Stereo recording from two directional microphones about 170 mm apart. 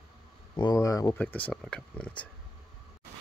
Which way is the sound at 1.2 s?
10° left (ahead or behind).